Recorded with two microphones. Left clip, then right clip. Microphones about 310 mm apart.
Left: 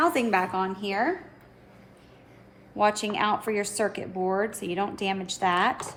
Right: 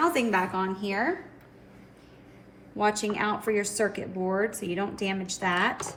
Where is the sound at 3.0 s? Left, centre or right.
Centre.